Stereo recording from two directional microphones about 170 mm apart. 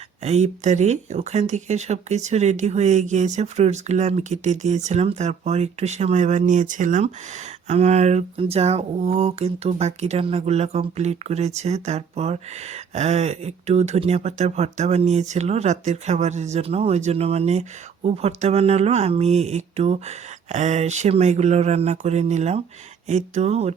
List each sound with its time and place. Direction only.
0.2 s speech: 40° right (ahead or behind)